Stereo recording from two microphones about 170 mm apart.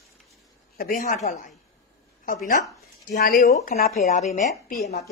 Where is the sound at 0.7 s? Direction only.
60° left (ahead or behind).